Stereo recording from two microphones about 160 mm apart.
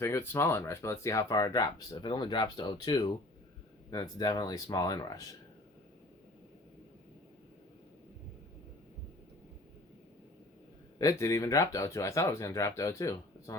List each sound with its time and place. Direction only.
0.0 s speech: 15° left (ahead or behind)
10.9 s speech: 20° left (ahead or behind)